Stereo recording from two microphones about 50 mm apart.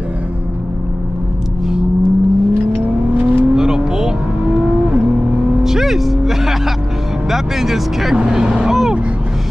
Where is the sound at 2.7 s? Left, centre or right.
Right.